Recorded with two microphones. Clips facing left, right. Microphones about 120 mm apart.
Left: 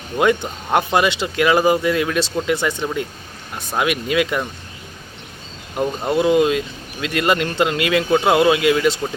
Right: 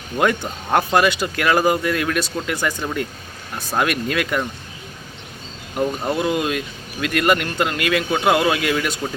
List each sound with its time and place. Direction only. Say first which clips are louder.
0.7 s speech: even; 15° left (ahead or behind)
5.7 s speech: left 2 dB; 20° left (ahead or behind)